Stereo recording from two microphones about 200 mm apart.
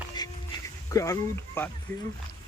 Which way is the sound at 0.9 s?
15° left (ahead or behind).